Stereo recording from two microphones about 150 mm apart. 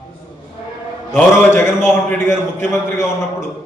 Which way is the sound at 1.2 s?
15° left (ahead or behind).